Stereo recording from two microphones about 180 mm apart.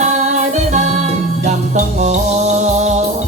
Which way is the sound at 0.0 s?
40° right (ahead or behind).